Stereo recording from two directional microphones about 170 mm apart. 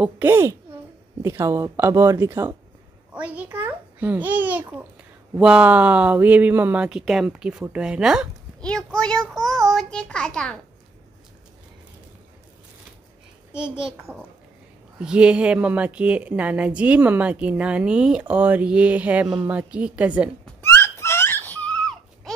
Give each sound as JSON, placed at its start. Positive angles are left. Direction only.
{"t": 0.0, "sound": "speech", "side_deg": -15}
{"t": 13.5, "sound": "speech", "side_deg": -5}
{"t": 20.6, "sound": "a sound", "side_deg": 15}